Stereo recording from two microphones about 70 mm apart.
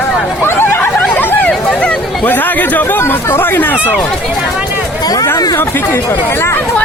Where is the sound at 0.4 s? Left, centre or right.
Left.